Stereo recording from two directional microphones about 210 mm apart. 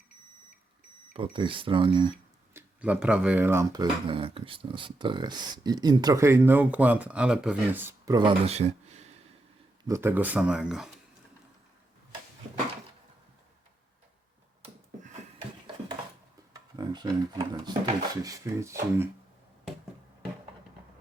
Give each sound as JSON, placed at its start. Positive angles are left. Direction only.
{"t": 1.1, "sound": "speech", "side_deg": -25}
{"t": 2.5, "sound": "speech", "side_deg": -10}
{"t": 9.8, "sound": "speech", "side_deg": -15}
{"t": 14.6, "sound": "a sound", "side_deg": -35}
{"t": 16.7, "sound": "speech", "side_deg": -20}